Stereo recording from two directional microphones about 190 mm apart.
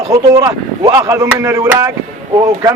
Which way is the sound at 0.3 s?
15° right (ahead or behind).